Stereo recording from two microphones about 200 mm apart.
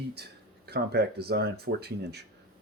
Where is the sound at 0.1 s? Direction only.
55° right (ahead or behind).